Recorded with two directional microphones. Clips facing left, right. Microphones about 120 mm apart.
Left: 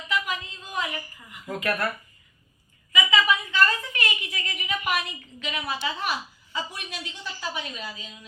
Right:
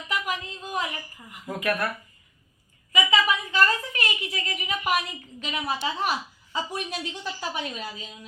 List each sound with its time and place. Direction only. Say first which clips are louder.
0.1 s a sound: left 1 dB; 40° right (ahead or behind)
1.5 s speech: even; 15° right (ahead or behind)
2.9 s a woman's voice: even; 40° right (ahead or behind)